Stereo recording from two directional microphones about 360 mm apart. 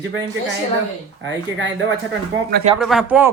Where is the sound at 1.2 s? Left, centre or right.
Right.